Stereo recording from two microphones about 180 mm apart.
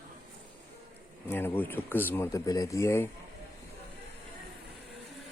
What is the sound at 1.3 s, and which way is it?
Speech, 10° left (ahead or behind).